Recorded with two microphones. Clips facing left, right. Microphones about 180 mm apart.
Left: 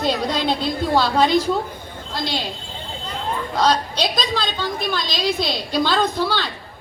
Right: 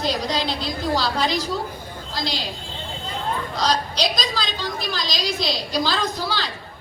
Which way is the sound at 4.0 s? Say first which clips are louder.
Left 2 dB; 55° left (ahead or behind).